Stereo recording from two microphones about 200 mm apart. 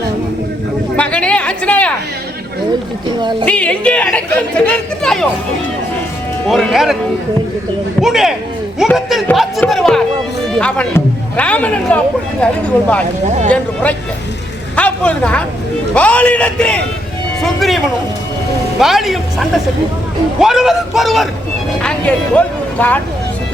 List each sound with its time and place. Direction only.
0.9 s a sound: 5° left (ahead or behind)
3.1 s speech: 20° right (ahead or behind)
3.4 s speech: 5° left (ahead or behind)
6.5 s speech: centre (ahead or behind)
8.0 s speech: centre (ahead or behind)
14.8 s speech: 5° left (ahead or behind)
18.8 s speech: centre (ahead or behind)